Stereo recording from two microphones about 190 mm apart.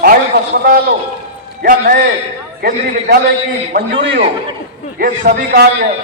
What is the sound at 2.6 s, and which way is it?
Speech, 55° right (ahead or behind).